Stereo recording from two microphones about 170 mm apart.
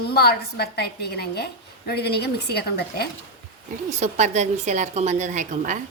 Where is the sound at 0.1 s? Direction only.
65° left (ahead or behind).